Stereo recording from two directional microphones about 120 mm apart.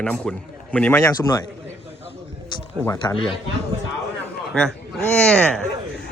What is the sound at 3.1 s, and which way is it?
Speech, 25° left (ahead or behind).